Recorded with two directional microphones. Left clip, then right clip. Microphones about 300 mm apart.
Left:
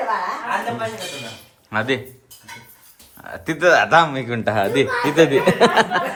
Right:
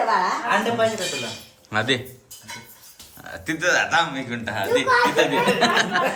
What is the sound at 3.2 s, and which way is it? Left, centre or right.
Speech, centre.